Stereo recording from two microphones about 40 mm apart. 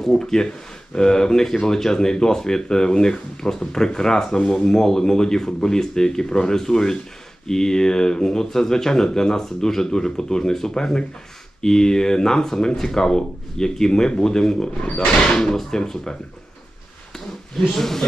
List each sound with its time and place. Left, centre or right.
0.2 s speech: centre
17.7 s speech: centre